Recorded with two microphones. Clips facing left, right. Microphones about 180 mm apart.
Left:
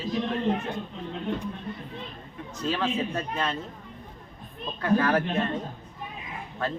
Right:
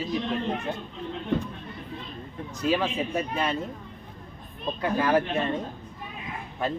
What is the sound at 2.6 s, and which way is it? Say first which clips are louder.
Speech: right 2 dB; 10° right (ahead or behind).